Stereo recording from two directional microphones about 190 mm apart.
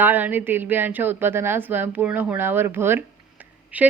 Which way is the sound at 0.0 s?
10° right (ahead or behind).